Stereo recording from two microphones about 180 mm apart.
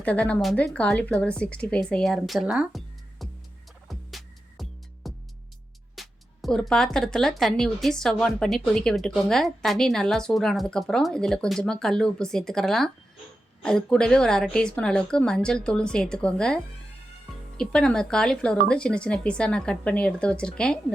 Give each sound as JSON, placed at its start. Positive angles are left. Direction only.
{"t": 0.0, "sound": "speech", "side_deg": 5}
{"t": 3.8, "sound": "music", "side_deg": 0}
{"t": 6.0, "sound": "speech", "side_deg": 0}
{"t": 17.6, "sound": "speech", "side_deg": 5}